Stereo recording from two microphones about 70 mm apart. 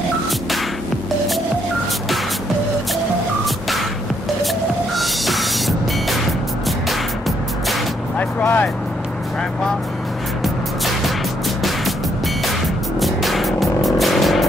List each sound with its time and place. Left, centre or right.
3.4 s music: centre
4.9 s music: centre
8.2 s vehicle: left
10.4 s music: centre
13.0 s music: centre